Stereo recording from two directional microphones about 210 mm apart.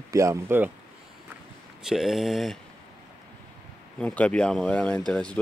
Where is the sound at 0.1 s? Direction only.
15° right (ahead or behind).